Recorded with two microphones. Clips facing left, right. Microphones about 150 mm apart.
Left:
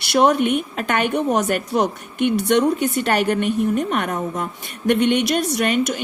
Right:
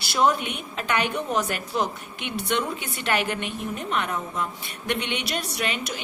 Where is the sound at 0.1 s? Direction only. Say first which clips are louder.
Left 7 dB; 60° left (ahead or behind).